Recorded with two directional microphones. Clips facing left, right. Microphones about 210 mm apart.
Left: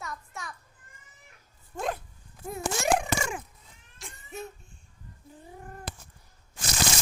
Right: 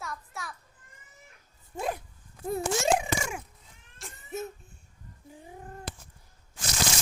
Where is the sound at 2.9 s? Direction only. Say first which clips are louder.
Left 1 dB; 10° right (ahead or behind).